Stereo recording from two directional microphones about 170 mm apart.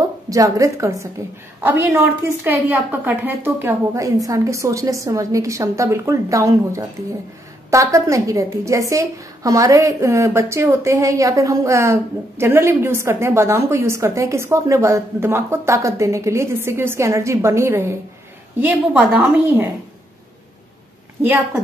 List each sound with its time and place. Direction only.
0.3 s a woman's voice: 20° right (ahead or behind)